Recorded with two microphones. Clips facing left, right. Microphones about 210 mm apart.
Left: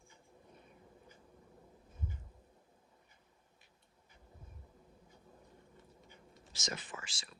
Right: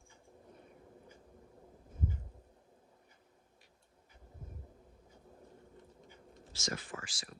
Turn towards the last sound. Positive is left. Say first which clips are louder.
# right 3 dB
turn(degrees=25)  # may be behind; listen again after turning